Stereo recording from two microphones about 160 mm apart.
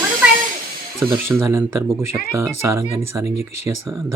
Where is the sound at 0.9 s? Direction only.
15° right (ahead or behind).